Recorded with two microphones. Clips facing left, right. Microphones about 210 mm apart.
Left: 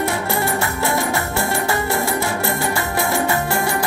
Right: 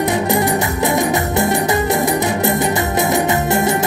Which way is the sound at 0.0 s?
20° right (ahead or behind).